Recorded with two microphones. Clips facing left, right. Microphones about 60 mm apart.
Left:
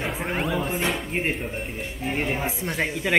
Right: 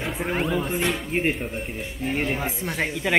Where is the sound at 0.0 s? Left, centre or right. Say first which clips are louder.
Right 1 dB; centre.